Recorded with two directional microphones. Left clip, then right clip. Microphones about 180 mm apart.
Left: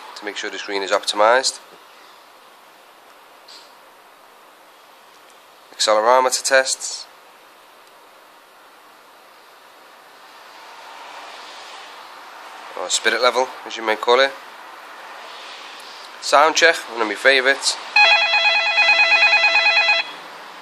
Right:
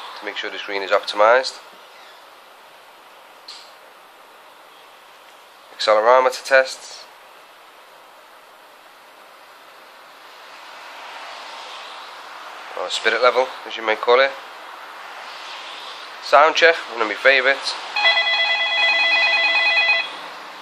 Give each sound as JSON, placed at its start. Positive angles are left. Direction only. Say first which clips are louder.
{"t": 0.2, "sound": "speech", "louder": "left 1 dB", "side_deg": 30}
{"t": 5.8, "sound": "speech", "louder": "right 1 dB", "side_deg": 30}
{"t": 12.7, "sound": "speech", "louder": "even", "side_deg": 30}
{"t": 16.2, "sound": "speech", "louder": "right 1 dB", "side_deg": 30}
{"t": 18.0, "sound": "telephone bell ringing", "louder": "left 1 dB", "side_deg": 55}